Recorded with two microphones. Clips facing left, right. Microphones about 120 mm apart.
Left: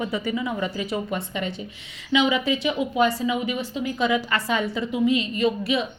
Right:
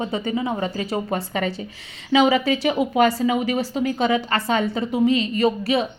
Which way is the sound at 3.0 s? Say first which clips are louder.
Right 3 dB; 70° right (ahead or behind).